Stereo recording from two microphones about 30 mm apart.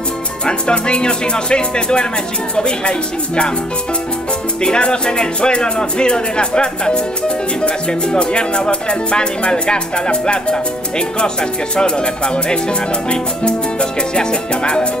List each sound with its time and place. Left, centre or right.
0.5 s speech: left
4.6 s speech: left